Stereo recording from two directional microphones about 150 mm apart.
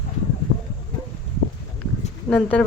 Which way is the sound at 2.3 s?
10° left (ahead or behind).